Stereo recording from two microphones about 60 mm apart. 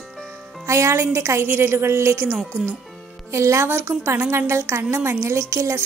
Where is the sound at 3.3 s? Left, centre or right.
Right.